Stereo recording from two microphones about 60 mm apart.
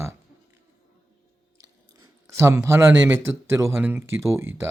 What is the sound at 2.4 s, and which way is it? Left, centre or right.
Speech, right.